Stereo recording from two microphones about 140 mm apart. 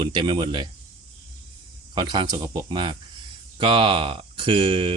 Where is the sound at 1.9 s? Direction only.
35° right (ahead or behind).